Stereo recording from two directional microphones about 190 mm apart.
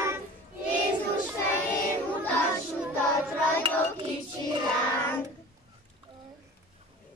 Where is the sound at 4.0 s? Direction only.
25° right (ahead or behind).